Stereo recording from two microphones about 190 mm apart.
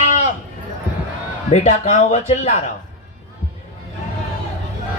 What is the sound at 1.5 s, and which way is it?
Speech, 35° left (ahead or behind).